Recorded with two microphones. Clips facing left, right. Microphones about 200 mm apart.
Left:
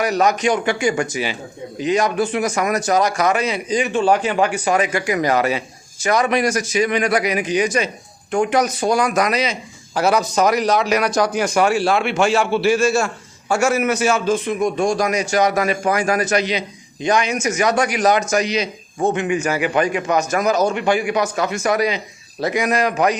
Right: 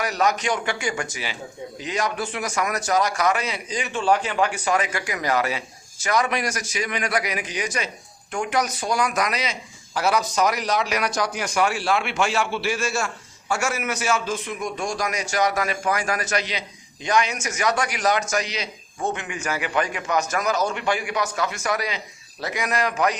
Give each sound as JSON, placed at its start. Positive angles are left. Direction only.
{"t": 0.0, "sound": "a man's voice", "side_deg": 20}
{"t": 10.1, "sound": "a man's voice", "side_deg": 45}
{"t": 14.8, "sound": "a man's voice", "side_deg": 55}
{"t": 15.0, "sound": "a man's voice", "side_deg": 20}